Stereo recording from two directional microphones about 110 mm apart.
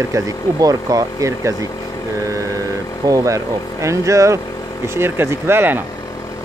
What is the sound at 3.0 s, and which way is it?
Speech, 30° right (ahead or behind).